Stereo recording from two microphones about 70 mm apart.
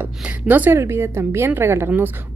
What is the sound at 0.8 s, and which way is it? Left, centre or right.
Speech, right.